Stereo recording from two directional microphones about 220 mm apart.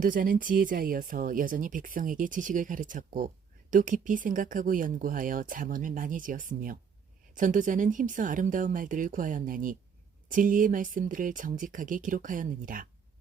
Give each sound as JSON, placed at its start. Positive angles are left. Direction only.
{"t": 0.0, "sound": "speech", "side_deg": -40}